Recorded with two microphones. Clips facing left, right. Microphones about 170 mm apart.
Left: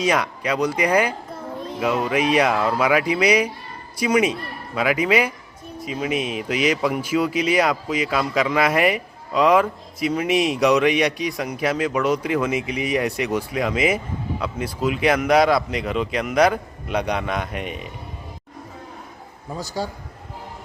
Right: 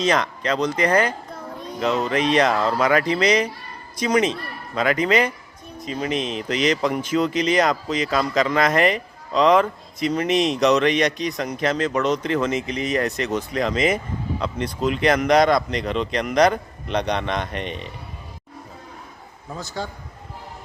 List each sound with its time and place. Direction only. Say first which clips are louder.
0.0 s speech: even; 10° left (ahead or behind)
19.5 s speech: left 3 dB; 10° left (ahead or behind)